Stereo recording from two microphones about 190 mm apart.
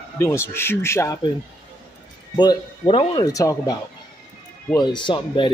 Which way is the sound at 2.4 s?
25° left (ahead or behind).